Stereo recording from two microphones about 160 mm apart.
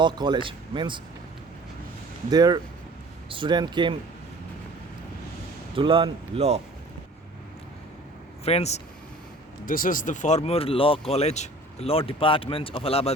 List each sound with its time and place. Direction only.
0.0 s speech: 30° right (ahead or behind)
2.3 s speech: 25° right (ahead or behind)
5.7 s speech: 35° right (ahead or behind)
8.4 s speech: 40° left (ahead or behind)
9.6 s speech: 60° left (ahead or behind); by 13.1 s 40° left (ahead or behind)